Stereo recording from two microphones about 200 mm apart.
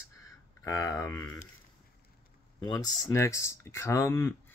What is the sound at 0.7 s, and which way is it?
Speech, 20° left (ahead or behind).